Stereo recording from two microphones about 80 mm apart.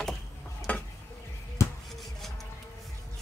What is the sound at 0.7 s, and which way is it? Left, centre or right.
Stir, left.